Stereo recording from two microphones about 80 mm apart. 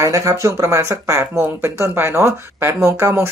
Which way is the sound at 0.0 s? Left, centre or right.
Right.